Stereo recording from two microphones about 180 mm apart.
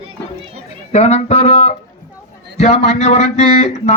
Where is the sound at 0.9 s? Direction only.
35° left (ahead or behind).